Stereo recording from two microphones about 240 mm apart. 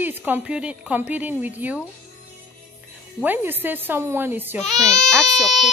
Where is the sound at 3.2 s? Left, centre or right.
Centre.